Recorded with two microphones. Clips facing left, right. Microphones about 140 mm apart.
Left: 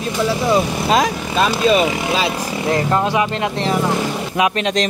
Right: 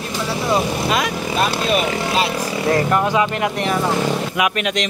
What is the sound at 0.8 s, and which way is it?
Speech, 35° left (ahead or behind).